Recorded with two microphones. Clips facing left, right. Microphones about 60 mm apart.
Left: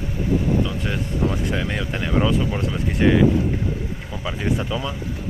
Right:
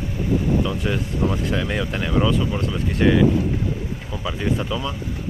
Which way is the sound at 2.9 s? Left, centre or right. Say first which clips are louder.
Even; centre.